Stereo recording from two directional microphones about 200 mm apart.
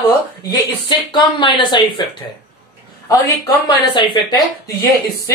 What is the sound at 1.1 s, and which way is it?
Speech, 20° left (ahead or behind).